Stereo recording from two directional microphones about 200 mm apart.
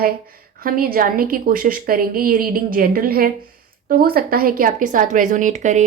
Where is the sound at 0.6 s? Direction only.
45° right (ahead or behind).